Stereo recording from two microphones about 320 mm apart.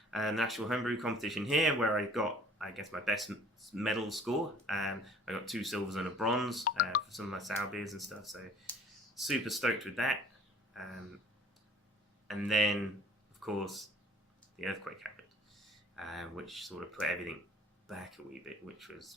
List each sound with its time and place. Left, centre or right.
0.1 s speech: centre
12.3 s speech: centre